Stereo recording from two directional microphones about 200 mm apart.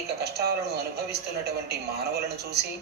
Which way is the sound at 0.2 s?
55° right (ahead or behind).